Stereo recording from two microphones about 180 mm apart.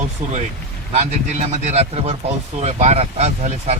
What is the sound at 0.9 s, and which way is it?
Speech, 35° right (ahead or behind).